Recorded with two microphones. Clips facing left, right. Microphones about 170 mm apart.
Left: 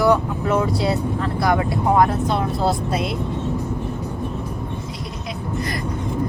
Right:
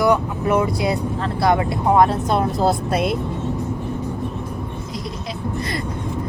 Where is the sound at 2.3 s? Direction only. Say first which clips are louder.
Right 2 dB; 45° right (ahead or behind).